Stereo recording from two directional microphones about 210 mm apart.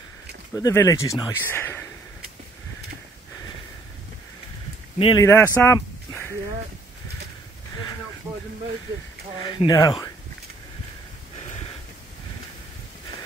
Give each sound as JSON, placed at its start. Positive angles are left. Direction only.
{"t": 0.6, "sound": "speech", "side_deg": 15}
{"t": 4.9, "sound": "speech", "side_deg": 25}
{"t": 5.2, "sound": "speech", "side_deg": 10}
{"t": 5.6, "sound": "a sound", "side_deg": 10}
{"t": 9.5, "sound": "speech", "side_deg": 20}